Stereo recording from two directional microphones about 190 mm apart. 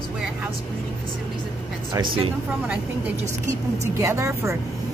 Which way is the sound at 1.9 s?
25° right (ahead or behind).